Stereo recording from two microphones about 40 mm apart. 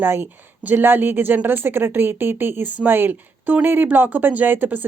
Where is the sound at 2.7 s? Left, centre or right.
Right.